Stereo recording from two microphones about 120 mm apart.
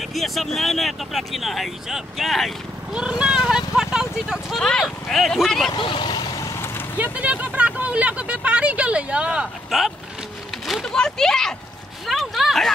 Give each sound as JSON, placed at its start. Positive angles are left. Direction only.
{"t": 0.1, "sound": "speech", "side_deg": 0}
{"t": 4.6, "sound": "speech", "side_deg": 5}
{"t": 5.7, "sound": "vehicle", "side_deg": 40}
{"t": 7.0, "sound": "speech", "side_deg": -10}